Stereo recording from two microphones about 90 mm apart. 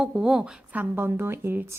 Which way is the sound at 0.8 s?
25° right (ahead or behind).